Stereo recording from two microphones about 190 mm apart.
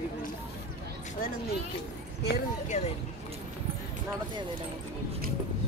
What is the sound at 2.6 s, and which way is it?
Speech, 35° left (ahead or behind).